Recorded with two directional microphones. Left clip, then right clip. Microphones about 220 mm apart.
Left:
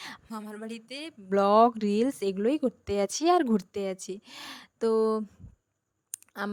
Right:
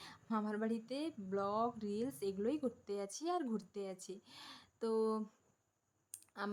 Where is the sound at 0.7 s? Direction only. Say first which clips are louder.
Left 2 dB; 40° left (ahead or behind).